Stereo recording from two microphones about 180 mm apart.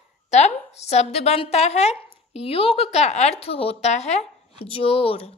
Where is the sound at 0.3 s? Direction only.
40° left (ahead or behind).